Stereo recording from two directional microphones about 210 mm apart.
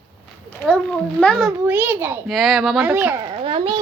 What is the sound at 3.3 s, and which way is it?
Speech, 25° right (ahead or behind).